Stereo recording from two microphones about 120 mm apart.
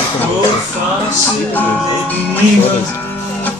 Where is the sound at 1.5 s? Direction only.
15° left (ahead or behind).